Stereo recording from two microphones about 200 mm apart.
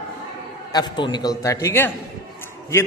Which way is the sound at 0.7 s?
20° left (ahead or behind).